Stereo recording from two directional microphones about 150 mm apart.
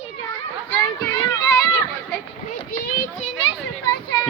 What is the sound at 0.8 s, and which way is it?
Children playing, 25° left (ahead or behind).